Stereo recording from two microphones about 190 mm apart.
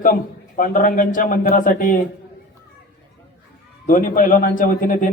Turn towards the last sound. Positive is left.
turn(degrees=45)  # may be behind; listen again after turning